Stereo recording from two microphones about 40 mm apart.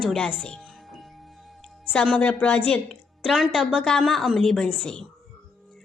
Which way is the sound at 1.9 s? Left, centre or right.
Centre.